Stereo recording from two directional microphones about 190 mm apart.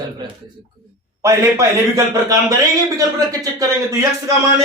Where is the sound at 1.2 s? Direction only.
15° right (ahead or behind).